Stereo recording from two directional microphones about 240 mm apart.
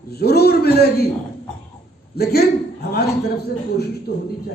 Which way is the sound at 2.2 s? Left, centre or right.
Left.